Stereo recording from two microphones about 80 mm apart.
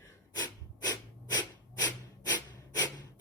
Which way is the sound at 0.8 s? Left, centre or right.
Left.